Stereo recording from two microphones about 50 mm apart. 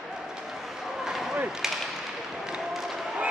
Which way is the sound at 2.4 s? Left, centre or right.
Centre.